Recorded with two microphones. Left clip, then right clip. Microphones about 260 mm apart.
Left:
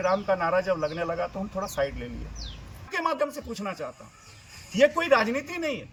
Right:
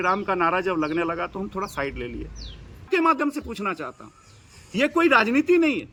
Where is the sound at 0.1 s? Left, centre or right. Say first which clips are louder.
Right 2 dB; right.